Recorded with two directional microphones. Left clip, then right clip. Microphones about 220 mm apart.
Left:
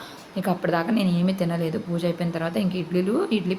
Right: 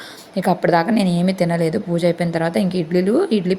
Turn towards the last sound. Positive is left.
turn(degrees=-25)  # may be behind; listen again after turning